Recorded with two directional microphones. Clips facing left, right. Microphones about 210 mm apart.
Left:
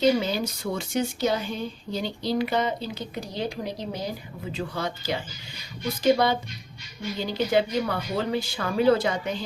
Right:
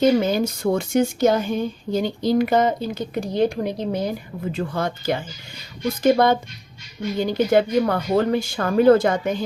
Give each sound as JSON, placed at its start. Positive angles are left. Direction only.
{"t": 0.0, "sound": "a woman's voice", "side_deg": -50}